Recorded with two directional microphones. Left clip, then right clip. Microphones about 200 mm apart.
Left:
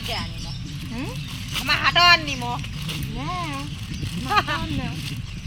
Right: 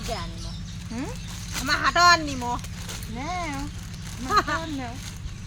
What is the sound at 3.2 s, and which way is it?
Speech, 5° right (ahead or behind).